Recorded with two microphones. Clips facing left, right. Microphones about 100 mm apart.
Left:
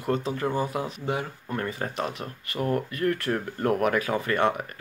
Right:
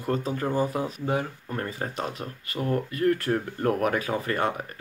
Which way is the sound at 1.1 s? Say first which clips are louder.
Even; 35° right (ahead or behind).